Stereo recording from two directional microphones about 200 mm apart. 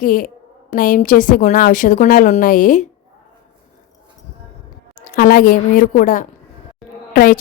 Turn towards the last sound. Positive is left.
turn(degrees=50)  # may be behind; listen again after turning